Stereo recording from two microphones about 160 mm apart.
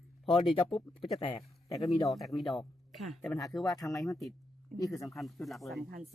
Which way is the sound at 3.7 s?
20° left (ahead or behind).